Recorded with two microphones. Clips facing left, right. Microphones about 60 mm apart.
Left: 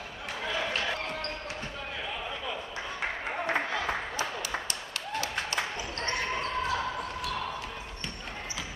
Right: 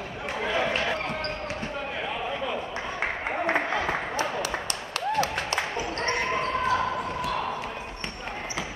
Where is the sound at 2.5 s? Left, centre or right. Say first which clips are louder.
Right 5 dB; right.